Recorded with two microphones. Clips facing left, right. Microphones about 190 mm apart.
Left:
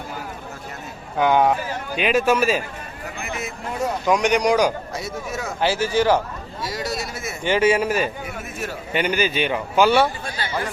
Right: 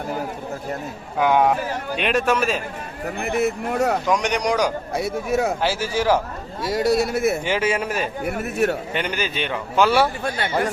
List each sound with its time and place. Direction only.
1.2 s a man's voice: centre (ahead or behind)
3.2 s speech: 60° right (ahead or behind)
4.0 s a man's voice: 5° left (ahead or behind)
4.9 s speech: 60° right (ahead or behind)
5.5 s a man's voice: 5° right (ahead or behind)
6.6 s speech: 55° right (ahead or behind)
7.4 s a man's voice: centre (ahead or behind)
8.2 s speech: 60° right (ahead or behind)
8.9 s a man's voice: 5° left (ahead or behind)
10.2 s speech: 60° right (ahead or behind)